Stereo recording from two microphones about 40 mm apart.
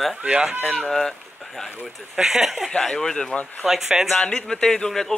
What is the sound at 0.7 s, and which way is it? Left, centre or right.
Speech, centre.